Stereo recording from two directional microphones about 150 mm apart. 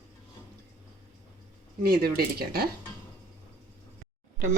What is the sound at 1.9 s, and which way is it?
Speech, 90° right.